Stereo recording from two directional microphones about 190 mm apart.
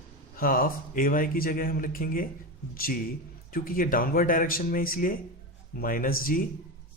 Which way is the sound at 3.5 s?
50° left (ahead or behind).